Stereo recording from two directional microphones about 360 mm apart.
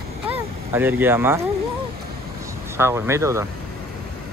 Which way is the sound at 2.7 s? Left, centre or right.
Centre.